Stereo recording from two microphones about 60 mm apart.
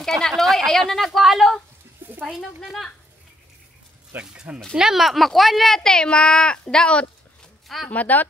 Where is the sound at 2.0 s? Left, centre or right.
Right.